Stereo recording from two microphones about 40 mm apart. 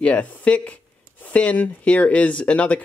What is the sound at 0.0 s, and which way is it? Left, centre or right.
Speech, left.